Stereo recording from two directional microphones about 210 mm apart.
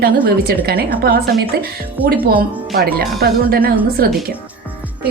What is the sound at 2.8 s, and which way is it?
Speech, 45° right (ahead or behind).